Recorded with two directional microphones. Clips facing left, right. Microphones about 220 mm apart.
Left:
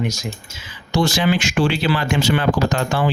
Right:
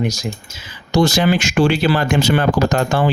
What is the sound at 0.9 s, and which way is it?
Speech, 40° right (ahead or behind).